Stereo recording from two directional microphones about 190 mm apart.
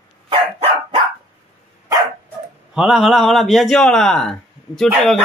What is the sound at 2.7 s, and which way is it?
A man's voice, 5° right (ahead or behind).